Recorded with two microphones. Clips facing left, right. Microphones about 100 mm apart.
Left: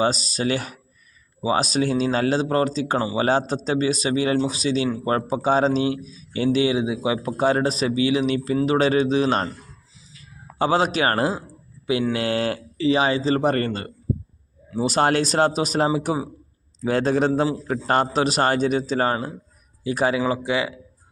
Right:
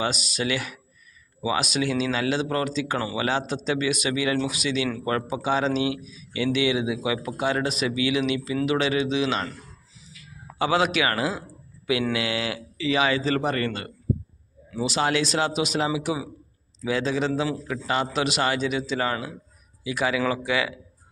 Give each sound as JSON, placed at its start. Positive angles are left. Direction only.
{"t": 0.0, "sound": "a man's voice", "side_deg": 35}
{"t": 10.1, "sound": "a sound", "side_deg": 35}
{"t": 12.1, "sound": "a man's voice", "side_deg": 45}